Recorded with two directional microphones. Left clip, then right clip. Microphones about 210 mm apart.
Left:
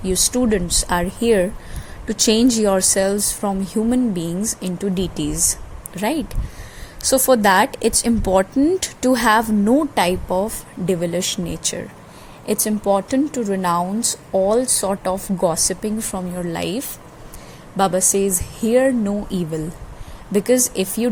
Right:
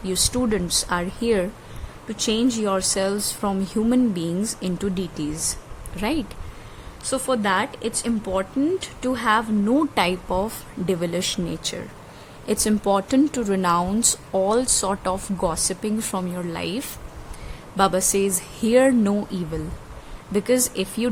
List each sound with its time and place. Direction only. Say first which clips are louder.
0.0 s speech: left 4 dB; centre (ahead or behind)
2.0 s speech: left 6 dB; 15° left (ahead or behind)
7.0 s speech: left 8 dB; 15° left (ahead or behind)
9.7 s speech: left 3 dB; centre (ahead or behind)
20.3 s speech: left 4 dB; 5° left (ahead or behind)